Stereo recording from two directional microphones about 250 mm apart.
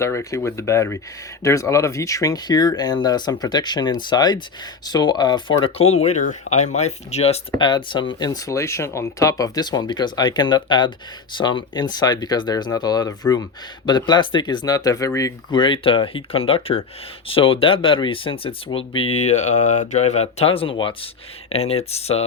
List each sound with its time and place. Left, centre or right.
0.0 s speech: centre